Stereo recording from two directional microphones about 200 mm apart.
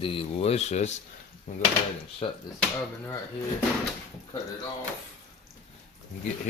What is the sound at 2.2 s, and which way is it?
Speech, 30° left (ahead or behind).